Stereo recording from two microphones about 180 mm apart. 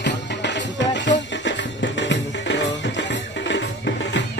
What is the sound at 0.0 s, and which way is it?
Music, 75° left (ahead or behind).